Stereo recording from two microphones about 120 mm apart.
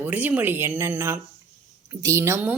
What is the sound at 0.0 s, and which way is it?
Speech, 15° right (ahead or behind).